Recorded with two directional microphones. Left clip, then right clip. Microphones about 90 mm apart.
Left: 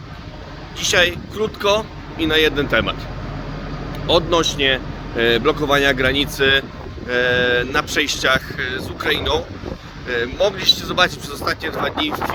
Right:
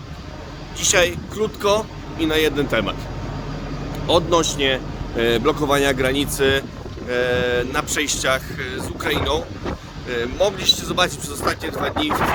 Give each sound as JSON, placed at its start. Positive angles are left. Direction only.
{"t": 0.8, "sound": "speech", "side_deg": -15}
{"t": 4.0, "sound": "speech", "side_deg": -15}